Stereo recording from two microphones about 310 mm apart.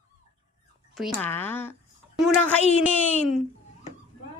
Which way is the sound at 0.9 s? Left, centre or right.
Centre.